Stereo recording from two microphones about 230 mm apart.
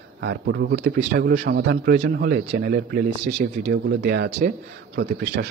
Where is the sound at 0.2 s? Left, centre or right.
Right.